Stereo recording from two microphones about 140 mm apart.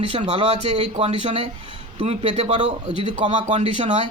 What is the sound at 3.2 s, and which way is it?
Speech, 55° right (ahead or behind).